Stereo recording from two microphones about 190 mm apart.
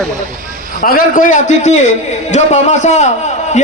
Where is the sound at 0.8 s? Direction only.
50° left (ahead or behind).